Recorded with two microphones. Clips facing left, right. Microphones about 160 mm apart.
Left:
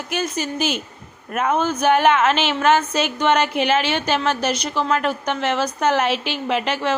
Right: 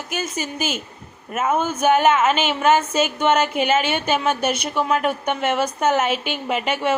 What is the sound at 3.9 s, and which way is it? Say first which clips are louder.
Music: even; 5° right (ahead or behind).